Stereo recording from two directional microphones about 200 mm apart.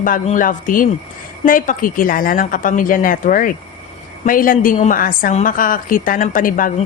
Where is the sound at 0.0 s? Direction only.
40° left (ahead or behind).